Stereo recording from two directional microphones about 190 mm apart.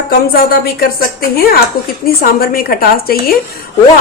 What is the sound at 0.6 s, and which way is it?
Speech, 50° left (ahead or behind).